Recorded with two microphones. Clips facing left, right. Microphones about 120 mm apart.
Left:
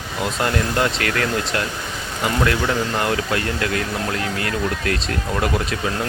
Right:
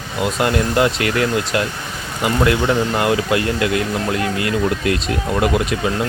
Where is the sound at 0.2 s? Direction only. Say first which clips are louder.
Right 4 dB; 10° right (ahead or behind).